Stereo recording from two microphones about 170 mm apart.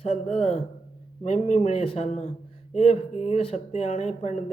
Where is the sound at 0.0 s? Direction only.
40° left (ahead or behind).